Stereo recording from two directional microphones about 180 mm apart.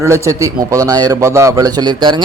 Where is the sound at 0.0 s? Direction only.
15° right (ahead or behind).